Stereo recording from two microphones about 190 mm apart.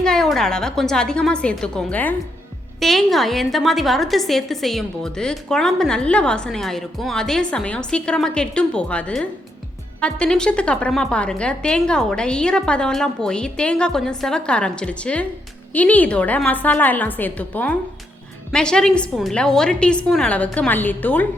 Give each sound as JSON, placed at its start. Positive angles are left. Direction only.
{"t": 0.0, "sound": "a woman's voice", "side_deg": 5}